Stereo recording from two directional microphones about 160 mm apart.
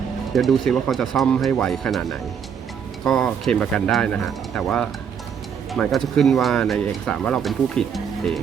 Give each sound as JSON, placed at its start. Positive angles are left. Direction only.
{"t": 0.3, "sound": "speech", "side_deg": 0}